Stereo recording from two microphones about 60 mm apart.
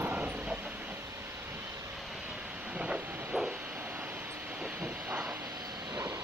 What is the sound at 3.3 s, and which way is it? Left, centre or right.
Vehicle, right.